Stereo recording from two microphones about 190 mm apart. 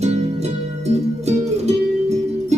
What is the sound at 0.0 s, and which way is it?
Music, 35° right (ahead or behind).